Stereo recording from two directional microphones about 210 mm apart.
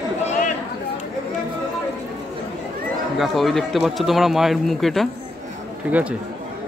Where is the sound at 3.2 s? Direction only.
Centre (ahead or behind).